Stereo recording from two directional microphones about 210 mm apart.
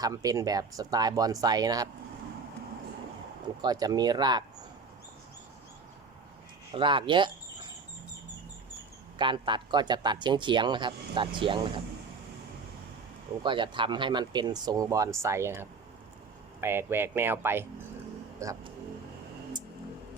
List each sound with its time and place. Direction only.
0.0 s speech: 15° right (ahead or behind)
3.6 s a man's voice: 20° right (ahead or behind)
6.7 s a man's voice: 25° right (ahead or behind)
9.1 s a man's voice: 20° right (ahead or behind)
13.4 s a man's voice: 20° right (ahead or behind)